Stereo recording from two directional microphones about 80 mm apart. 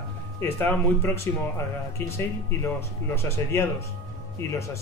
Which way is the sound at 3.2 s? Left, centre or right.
Left.